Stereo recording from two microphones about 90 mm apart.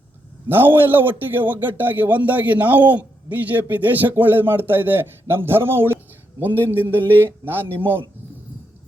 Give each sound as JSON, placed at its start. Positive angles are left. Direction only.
{"t": 0.4, "sound": "a man's voice", "side_deg": -20}